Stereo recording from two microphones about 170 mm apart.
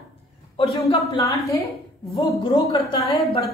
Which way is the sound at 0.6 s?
30° left (ahead or behind).